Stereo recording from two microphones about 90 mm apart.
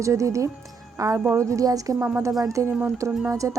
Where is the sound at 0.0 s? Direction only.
35° right (ahead or behind).